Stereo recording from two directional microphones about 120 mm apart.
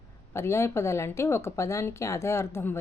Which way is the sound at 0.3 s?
20° left (ahead or behind).